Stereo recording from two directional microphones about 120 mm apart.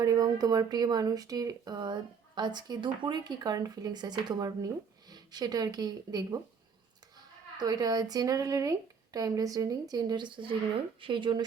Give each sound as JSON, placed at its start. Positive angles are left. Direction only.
{"t": 0.0, "sound": "speech", "side_deg": -30}
{"t": 7.6, "sound": "a woman's voice", "side_deg": -35}